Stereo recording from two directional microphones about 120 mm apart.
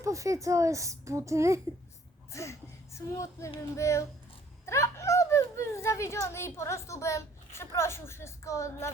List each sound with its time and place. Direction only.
0.0 s speech: 25° right (ahead or behind)
2.3 s speech: 25° left (ahead or behind)